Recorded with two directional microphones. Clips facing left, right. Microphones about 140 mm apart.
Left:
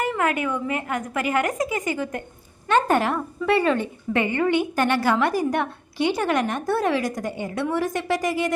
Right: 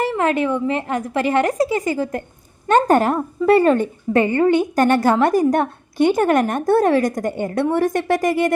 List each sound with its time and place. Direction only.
0.0 s a woman's voice: 30° right (ahead or behind); by 8.5 s 55° right (ahead or behind)